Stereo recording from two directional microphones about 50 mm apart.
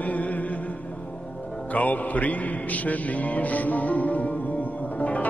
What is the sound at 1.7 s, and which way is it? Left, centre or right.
Music, left.